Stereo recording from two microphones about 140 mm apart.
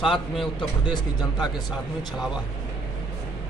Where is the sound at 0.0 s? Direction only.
Centre (ahead or behind).